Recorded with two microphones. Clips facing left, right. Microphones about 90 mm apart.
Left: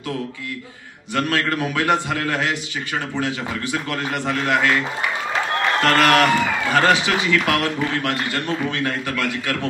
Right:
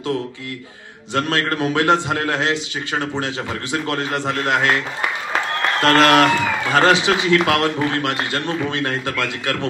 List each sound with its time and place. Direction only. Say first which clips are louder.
1.1 s a man's voice: right 1 dB; 25° right (ahead or behind)